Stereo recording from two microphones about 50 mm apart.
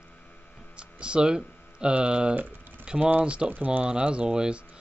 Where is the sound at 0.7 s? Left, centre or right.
Right.